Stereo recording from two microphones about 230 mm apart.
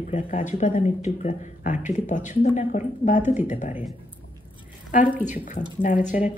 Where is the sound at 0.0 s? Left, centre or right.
Left.